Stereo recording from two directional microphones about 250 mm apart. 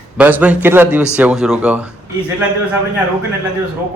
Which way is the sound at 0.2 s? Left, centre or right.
Centre.